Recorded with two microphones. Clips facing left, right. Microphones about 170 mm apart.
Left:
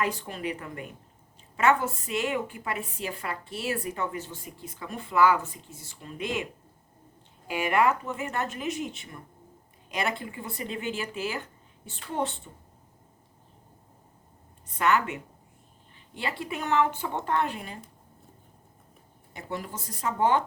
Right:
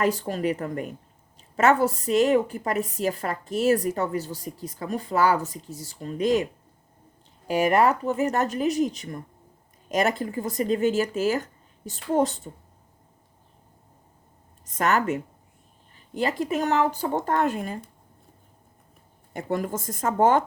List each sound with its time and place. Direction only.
0.0 s a woman's voice: 40° right (ahead or behind)
14.7 s a woman's voice: 45° right (ahead or behind)
19.3 s speech: 50° right (ahead or behind)